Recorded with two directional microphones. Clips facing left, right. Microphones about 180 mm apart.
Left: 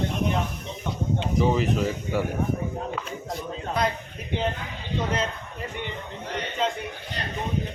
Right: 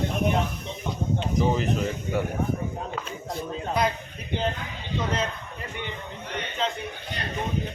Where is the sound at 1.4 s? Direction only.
Centre (ahead or behind).